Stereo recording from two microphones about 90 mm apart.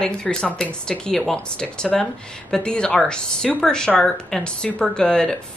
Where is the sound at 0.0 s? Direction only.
10° left (ahead or behind).